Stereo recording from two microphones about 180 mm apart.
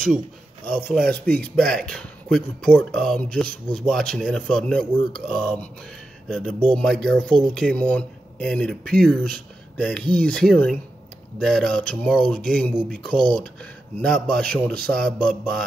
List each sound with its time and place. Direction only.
0.8 s speech: 10° left (ahead or behind)